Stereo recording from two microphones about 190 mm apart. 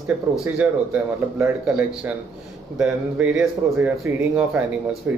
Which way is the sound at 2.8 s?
5° right (ahead or behind).